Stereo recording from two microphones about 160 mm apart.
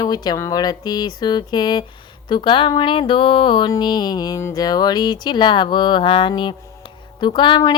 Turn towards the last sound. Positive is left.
turn(degrees=30)  # may be behind; listen again after turning